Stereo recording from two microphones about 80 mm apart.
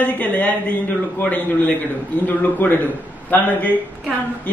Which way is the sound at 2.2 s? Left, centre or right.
Left.